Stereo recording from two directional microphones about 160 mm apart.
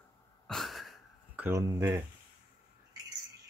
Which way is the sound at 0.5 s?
Centre (ahead or behind).